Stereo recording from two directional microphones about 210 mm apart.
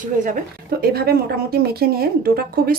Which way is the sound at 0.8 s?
45° right (ahead or behind).